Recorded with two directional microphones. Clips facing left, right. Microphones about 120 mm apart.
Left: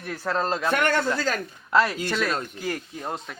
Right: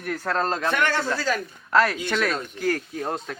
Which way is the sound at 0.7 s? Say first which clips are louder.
Left 4 dB; 50° left (ahead or behind).